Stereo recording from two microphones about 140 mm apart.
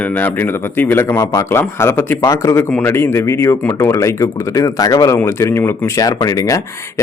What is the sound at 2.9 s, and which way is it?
Speech, 20° left (ahead or behind).